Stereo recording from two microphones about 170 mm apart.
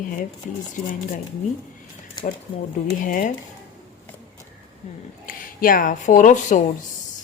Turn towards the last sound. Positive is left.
turn(degrees=45)  # may be behind; listen again after turning